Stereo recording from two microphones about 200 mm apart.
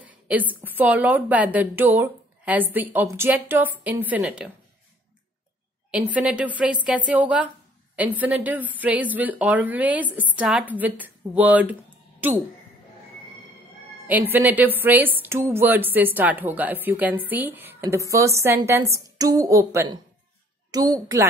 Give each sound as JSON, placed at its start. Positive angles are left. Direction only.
{"t": 0.0, "sound": "a woman's voice", "side_deg": -10}
{"t": 5.9, "sound": "a woman's voice", "side_deg": -5}
{"t": 14.0, "sound": "a woman's voice", "side_deg": -10}